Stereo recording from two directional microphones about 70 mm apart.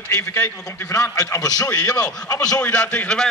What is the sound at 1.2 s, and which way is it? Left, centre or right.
A man's voice, left.